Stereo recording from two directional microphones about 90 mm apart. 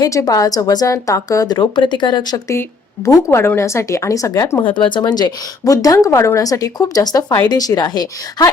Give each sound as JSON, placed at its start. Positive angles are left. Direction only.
{"t": 0.0, "sound": "a woman's voice", "side_deg": 40}
{"t": 2.5, "sound": "speech", "side_deg": 35}
{"t": 4.7, "sound": "a woman's voice", "side_deg": 65}